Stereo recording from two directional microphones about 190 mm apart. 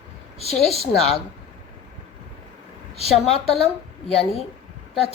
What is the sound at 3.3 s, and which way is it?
Speech, 30° left (ahead or behind).